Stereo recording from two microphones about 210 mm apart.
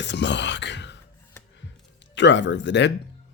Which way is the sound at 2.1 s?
60° left (ahead or behind).